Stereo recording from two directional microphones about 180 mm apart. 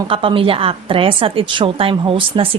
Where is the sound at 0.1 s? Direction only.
30° right (ahead or behind).